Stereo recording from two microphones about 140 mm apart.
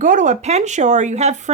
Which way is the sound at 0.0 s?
65° right (ahead or behind).